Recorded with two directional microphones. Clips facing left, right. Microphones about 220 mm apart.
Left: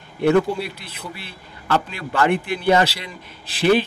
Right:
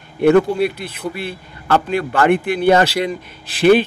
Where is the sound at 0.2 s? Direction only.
60° right (ahead or behind).